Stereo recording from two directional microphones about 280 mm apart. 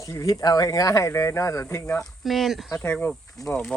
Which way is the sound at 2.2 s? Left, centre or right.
Centre.